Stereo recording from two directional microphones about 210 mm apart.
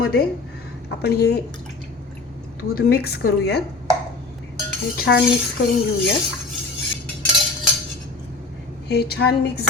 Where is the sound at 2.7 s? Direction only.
50° left (ahead or behind).